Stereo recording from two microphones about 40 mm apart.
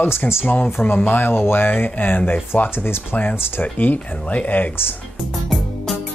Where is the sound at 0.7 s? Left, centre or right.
Left.